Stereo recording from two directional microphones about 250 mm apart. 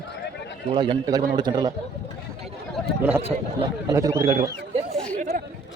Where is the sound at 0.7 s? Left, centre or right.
Centre.